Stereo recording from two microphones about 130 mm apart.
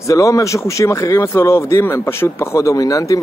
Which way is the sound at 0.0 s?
25° left (ahead or behind).